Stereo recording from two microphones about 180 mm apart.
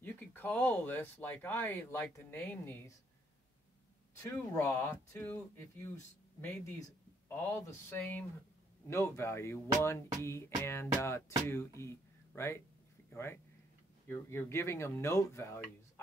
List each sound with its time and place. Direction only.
0.0 s speech: 10° left (ahead or behind)
4.2 s a man's voice: 15° left (ahead or behind)
8.8 s speech: 15° left (ahead or behind)